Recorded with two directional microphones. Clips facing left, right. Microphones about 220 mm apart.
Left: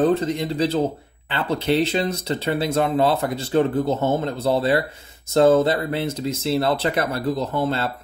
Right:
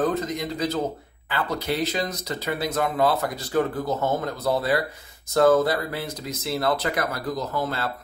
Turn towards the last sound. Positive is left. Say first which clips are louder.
# left 5 dB
turn(degrees=25)  # may be behind; listen again after turning